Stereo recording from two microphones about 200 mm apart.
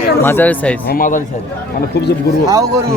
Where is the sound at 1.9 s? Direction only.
55° left (ahead or behind).